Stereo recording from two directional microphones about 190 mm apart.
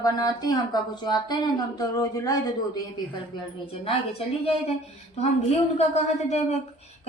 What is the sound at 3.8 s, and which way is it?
Speech, 30° left (ahead or behind).